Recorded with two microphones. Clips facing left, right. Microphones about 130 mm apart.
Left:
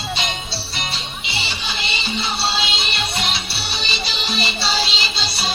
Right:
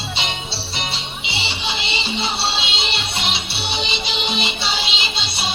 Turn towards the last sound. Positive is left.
turn(degrees=-20)  # may be behind; listen again after turning